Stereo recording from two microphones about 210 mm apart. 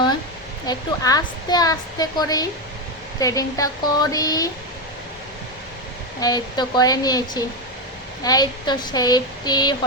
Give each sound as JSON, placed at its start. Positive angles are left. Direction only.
{"t": 0.7, "sound": "a woman's voice", "side_deg": 20}
{"t": 6.1, "sound": "a woman's voice", "side_deg": 20}
{"t": 8.2, "sound": "a sound", "side_deg": 20}